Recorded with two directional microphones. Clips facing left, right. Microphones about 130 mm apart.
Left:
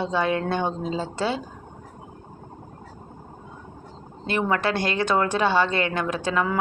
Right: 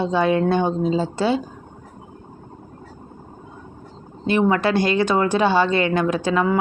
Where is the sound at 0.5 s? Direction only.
15° right (ahead or behind).